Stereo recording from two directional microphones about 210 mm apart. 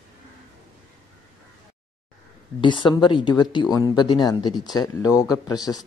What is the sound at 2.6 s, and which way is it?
Speech, 20° left (ahead or behind).